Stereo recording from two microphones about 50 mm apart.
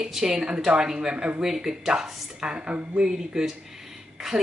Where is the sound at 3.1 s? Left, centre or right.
Centre.